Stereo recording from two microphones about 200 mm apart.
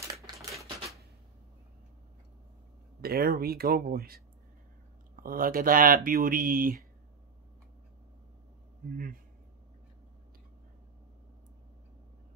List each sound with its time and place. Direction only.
0.1 s typewriter: 15° right (ahead or behind)
3.0 s speech: 50° right (ahead or behind)
8.9 s speech: 45° right (ahead or behind)